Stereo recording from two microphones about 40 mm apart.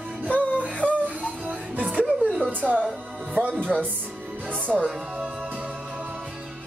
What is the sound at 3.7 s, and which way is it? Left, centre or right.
Music, centre.